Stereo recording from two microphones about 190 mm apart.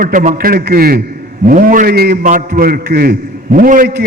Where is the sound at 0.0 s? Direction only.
45° right (ahead or behind).